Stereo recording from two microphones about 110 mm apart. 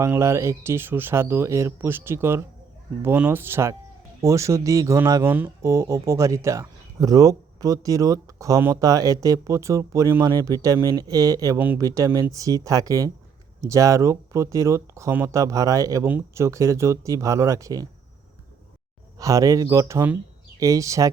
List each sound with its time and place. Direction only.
0.0 s speech: 25° right (ahead or behind)
5.2 s speech: 15° right (ahead or behind)
19.2 s speech: 30° right (ahead or behind)